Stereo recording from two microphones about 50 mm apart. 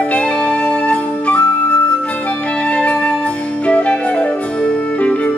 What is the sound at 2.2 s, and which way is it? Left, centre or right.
Flute, left.